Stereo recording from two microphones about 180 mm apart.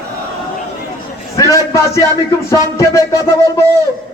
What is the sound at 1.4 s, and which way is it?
A man's voice, 15° left (ahead or behind).